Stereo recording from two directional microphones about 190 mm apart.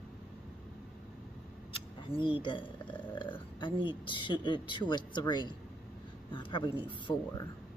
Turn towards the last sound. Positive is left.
turn(degrees=25)  # may be behind; listen again after turning